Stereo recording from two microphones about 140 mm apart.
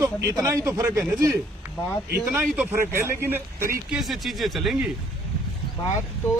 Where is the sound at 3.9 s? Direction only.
Centre (ahead or behind).